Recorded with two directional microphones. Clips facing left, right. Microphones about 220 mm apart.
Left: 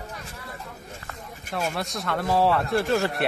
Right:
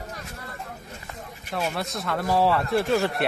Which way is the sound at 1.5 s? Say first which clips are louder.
Even; centre (ahead or behind).